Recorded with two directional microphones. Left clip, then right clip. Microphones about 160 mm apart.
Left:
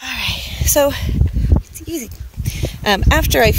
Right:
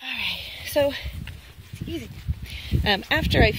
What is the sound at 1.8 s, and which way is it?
Speech, 25° left (ahead or behind).